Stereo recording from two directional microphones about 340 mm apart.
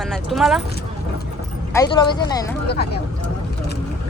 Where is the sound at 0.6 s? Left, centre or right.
Left.